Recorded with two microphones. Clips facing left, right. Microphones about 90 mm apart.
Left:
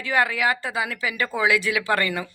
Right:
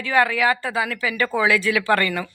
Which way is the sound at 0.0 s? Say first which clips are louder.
Right 3 dB; 20° left (ahead or behind).